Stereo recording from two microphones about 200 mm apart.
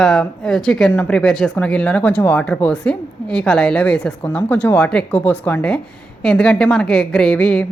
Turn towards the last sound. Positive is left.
turn(degrees=5)  # may be behind; listen again after turning